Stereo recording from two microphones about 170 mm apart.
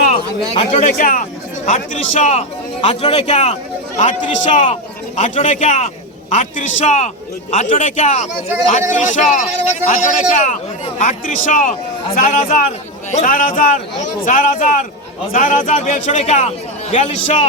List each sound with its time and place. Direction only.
0.1 s a man's voice: 40° left (ahead or behind)